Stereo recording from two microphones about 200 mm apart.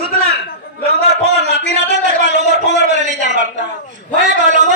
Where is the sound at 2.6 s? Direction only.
35° right (ahead or behind).